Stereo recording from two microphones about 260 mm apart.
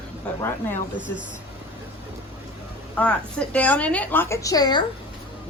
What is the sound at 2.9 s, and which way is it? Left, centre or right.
A woman's voice, centre.